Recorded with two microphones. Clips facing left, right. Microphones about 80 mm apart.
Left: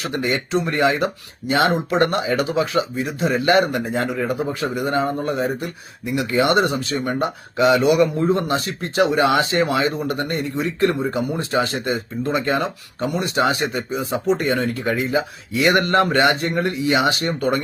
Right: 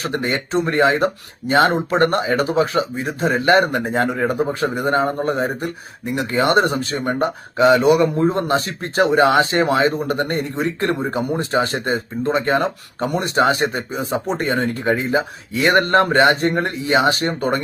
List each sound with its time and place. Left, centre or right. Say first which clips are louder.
0.0 s speech: right 1 dB; right